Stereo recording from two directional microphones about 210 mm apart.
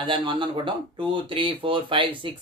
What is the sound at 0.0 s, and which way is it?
Speech, 25° right (ahead or behind).